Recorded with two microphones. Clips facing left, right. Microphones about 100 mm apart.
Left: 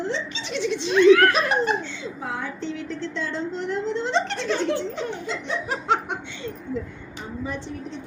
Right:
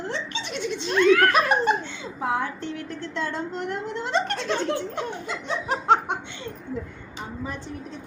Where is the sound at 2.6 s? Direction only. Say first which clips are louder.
Left 3 dB; 55° right (ahead or behind).